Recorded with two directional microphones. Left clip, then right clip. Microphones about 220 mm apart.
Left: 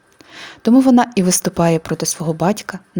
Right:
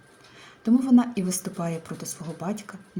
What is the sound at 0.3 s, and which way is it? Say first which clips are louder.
A woman's voice: left 11 dB; 45° left (ahead or behind).